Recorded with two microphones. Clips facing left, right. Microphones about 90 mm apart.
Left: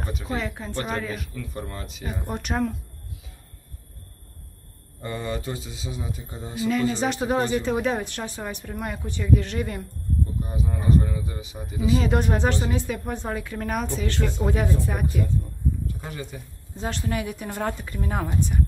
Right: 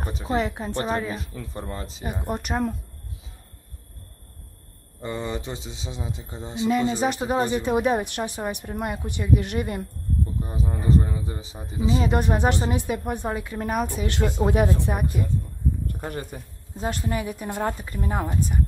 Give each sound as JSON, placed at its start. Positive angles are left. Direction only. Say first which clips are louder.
{"t": 0.3, "sound": "a woman's voice", "louder": "right 6 dB", "side_deg": -20}
{"t": 2.2, "sound": "a woman's voice", "louder": "right 1 dB", "side_deg": -5}
{"t": 5.0, "sound": "a woman's voice", "louder": "even", "side_deg": -20}
{"t": 7.1, "sound": "a woman's voice", "louder": "even", "side_deg": -5}
{"t": 10.4, "sound": "speech", "louder": "even", "side_deg": -30}
{"t": 12.0, "sound": "a woman's voice", "louder": "even", "side_deg": -5}
{"t": 12.3, "sound": "speech", "louder": "right 1 dB", "side_deg": -15}
{"t": 13.9, "sound": "a woman's voice", "louder": "right 2 dB", "side_deg": -15}
{"t": 15.9, "sound": "a sound", "louder": "right 3 dB", "side_deg": -50}
{"t": 16.8, "sound": "a woman's voice", "louder": "right 1 dB", "side_deg": -5}